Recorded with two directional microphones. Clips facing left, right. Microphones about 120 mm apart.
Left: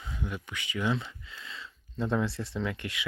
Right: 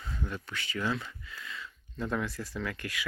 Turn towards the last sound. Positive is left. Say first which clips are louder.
# left 3 dB
turn(degrees=20)  # may be behind; listen again after turning